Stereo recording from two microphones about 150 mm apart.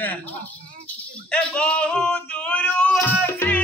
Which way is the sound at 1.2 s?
5° left (ahead or behind).